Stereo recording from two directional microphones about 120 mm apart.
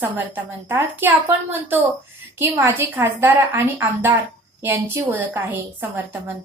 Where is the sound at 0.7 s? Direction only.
20° right (ahead or behind).